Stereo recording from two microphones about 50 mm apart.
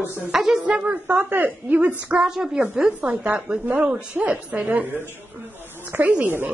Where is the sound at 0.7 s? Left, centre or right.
Right.